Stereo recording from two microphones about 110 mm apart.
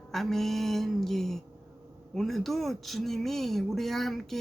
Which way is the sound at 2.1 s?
Centre (ahead or behind).